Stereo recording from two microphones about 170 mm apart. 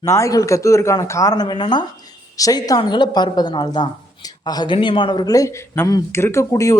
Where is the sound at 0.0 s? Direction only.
20° left (ahead or behind).